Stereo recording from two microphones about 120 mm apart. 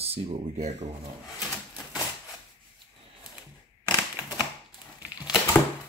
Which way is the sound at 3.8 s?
35° left (ahead or behind).